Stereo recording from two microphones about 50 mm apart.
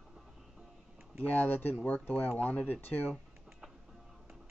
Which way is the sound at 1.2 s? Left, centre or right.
Left.